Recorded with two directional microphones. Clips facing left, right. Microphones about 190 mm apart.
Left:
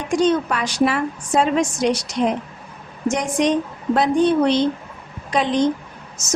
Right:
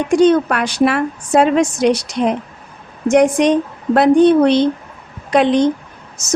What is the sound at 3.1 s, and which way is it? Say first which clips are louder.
A woman's voice: right 7 dB; 65° right (ahead or behind).